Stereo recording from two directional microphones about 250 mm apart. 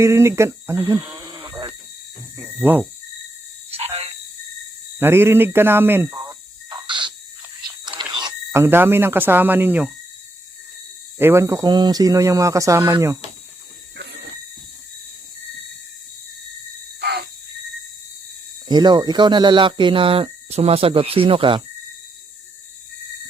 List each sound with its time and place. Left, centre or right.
0.0 s speech: centre
3.7 s frog: right
4.9 s speech: centre
8.1 s speech: centre
11.2 s speech: centre
13.9 s a sound: right
17.0 s cricket: right
18.7 s speech: centre